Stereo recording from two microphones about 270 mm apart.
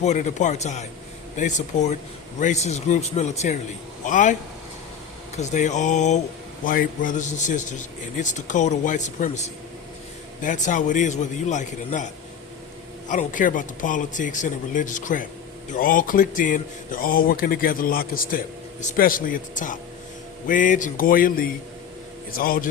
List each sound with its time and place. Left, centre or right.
0.0 s speech: left
5.4 s speech: left
13.1 s speech: left